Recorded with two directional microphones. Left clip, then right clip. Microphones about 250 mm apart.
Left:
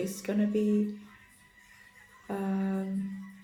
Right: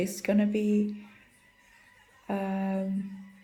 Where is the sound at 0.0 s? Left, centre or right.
Right.